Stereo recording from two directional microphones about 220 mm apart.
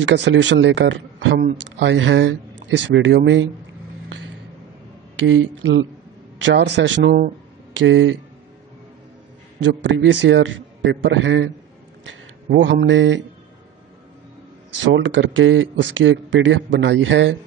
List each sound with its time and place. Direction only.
0.0 s a man's voice: 55° right (ahead or behind)
5.2 s a man's voice: 60° right (ahead or behind)
7.7 s a man's voice: 60° right (ahead or behind)
9.6 s a man's voice: 55° right (ahead or behind)
15.0 s a man's voice: 60° right (ahead or behind)